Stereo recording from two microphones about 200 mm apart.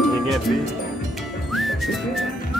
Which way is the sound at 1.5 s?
Centre (ahead or behind).